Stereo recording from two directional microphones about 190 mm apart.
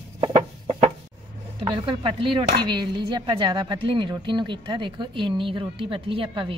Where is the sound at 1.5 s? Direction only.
25° right (ahead or behind).